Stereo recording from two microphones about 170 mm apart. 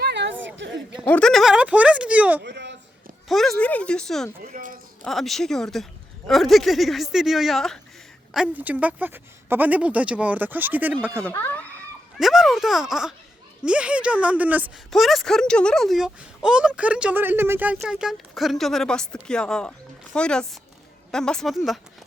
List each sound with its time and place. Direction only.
0.0 s a sound: 90° right
1.0 s speech: 5° left (ahead or behind)
2.4 s a sound: 90° right
3.2 s speech: centre (ahead or behind)
4.5 s speech: 55° right (ahead or behind)
5.0 s speech: centre (ahead or behind)
11.2 s speech: 10° left (ahead or behind)
12.1 s speech: centre (ahead or behind)